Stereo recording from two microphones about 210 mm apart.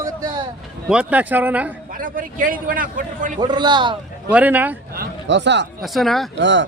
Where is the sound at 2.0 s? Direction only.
40° right (ahead or behind).